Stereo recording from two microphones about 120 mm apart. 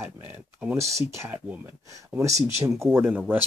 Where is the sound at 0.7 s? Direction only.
25° right (ahead or behind).